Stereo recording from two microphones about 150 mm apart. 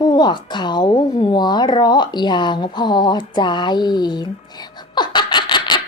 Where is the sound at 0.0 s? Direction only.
30° left (ahead or behind).